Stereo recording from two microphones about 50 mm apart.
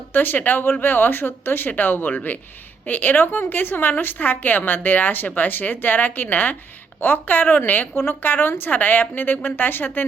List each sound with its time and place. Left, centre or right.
0.1 s a woman's voice: left